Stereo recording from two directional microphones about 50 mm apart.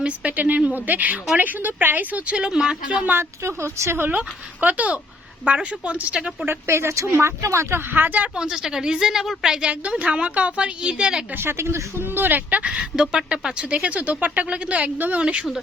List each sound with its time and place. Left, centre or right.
0.0 s a woman's voice: right
2.3 s a woman's voice: centre
3.1 s a woman's voice: right
4.6 s speech: right
6.7 s speech: right
7.9 s a woman's voice: right
8.4 s a woman's voice: centre
11.3 s a woman's voice: right
12.1 s a woman's voice: right
12.6 s a woman's voice: right
15.2 s speech: right